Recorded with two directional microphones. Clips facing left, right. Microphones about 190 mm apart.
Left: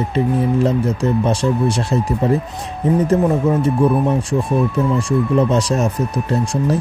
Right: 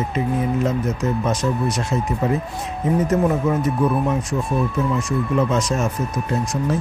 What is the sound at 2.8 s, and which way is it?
Speech, 35° left (ahead or behind).